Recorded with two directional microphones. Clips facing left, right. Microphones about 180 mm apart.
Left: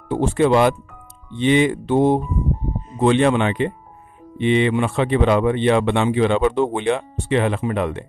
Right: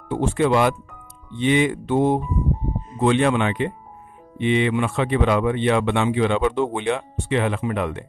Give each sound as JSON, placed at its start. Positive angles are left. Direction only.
{"t": 0.1, "sound": "speech", "side_deg": 35}